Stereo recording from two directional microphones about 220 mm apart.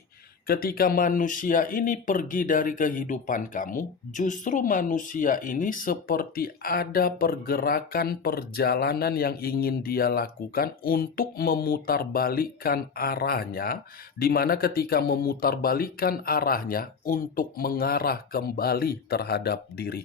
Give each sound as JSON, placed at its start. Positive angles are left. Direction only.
{"t": 0.4, "sound": "speech", "side_deg": 45}